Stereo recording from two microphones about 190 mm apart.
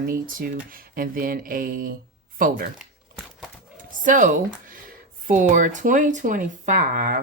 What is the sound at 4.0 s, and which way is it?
Speech, 45° right (ahead or behind).